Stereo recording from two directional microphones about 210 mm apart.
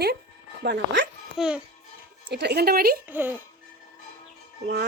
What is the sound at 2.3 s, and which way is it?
Speech, 55° right (ahead or behind).